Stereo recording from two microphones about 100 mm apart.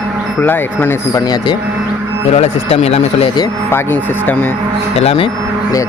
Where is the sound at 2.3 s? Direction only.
90° left.